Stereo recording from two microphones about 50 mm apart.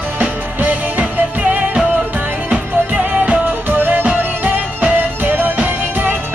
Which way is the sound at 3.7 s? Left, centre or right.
Right.